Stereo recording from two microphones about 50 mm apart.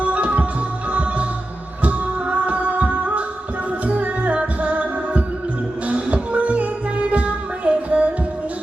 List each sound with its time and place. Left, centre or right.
0.0 s music: right
2.5 s music: right